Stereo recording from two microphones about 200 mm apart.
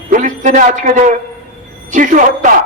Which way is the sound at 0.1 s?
40° right (ahead or behind).